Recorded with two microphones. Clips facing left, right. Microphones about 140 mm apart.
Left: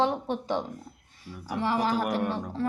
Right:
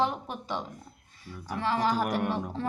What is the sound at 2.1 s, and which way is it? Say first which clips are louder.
Speech: left 1 dB; 5° right (ahead or behind).